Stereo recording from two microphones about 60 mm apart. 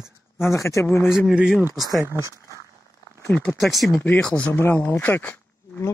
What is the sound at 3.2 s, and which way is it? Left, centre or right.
Speech, left.